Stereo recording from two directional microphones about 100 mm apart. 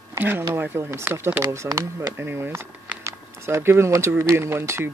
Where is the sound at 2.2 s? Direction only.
25° right (ahead or behind).